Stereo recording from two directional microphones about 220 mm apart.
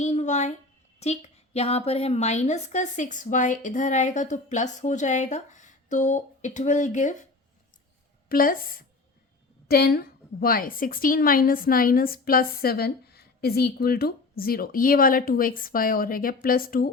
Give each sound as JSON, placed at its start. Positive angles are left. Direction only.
{"t": 0.0, "sound": "a sound", "side_deg": 30}
{"t": 0.9, "sound": "a woman's voice", "side_deg": 30}
{"t": 8.3, "sound": "a woman's voice", "side_deg": 40}